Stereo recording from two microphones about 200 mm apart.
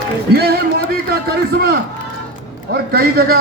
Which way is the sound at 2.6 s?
50° right (ahead or behind).